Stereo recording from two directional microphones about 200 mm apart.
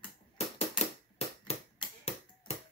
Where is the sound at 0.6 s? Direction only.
30° left (ahead or behind).